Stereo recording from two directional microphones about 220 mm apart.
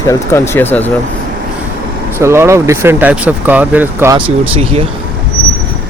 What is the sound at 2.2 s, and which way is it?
Speech, 10° right (ahead or behind).